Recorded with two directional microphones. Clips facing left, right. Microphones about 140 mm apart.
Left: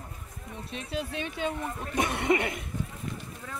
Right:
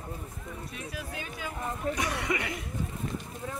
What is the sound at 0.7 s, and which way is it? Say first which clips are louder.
Speech: left 8 dB; 25° left (ahead or behind).